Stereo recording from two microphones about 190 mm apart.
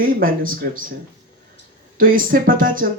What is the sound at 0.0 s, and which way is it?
Speech, 50° right (ahead or behind).